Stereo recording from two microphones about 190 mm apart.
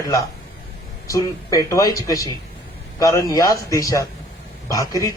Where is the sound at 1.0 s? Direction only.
15° left (ahead or behind).